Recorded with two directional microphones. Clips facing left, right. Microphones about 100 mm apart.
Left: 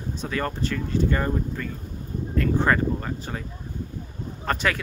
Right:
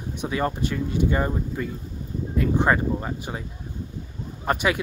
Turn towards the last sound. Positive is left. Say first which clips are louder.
# right 2 dB
turn(degrees=-15)  # may be behind; listen again after turning